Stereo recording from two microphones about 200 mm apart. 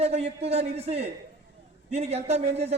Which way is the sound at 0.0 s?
30° right (ahead or behind).